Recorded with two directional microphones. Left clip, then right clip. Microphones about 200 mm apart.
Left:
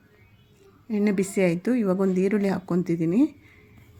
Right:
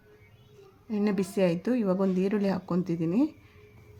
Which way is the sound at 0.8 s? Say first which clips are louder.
Left 4 dB; 15° left (ahead or behind).